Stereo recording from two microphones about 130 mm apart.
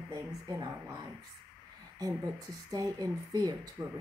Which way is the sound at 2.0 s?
30° right (ahead or behind).